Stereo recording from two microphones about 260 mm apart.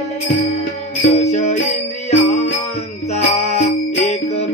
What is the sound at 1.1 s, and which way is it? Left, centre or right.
Music, left.